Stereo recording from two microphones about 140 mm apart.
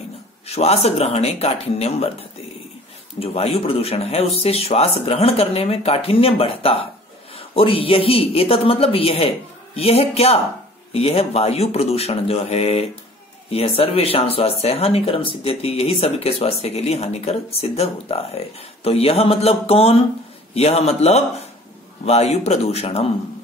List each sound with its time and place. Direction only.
0.5 s speech: 50° left (ahead or behind)